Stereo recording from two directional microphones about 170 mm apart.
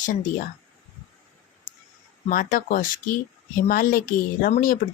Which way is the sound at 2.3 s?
55° left (ahead or behind).